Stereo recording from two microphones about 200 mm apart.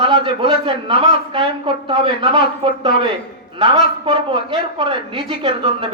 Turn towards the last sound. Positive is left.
turn(degrees=-25)  # may be behind; listen again after turning